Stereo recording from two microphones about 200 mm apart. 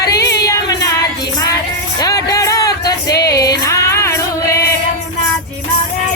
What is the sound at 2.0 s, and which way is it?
Music, 15° left (ahead or behind).